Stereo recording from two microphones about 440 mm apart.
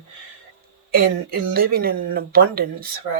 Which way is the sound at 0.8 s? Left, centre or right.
Centre.